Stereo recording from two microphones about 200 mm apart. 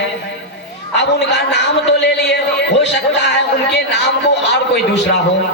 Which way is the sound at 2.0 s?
60° left (ahead or behind).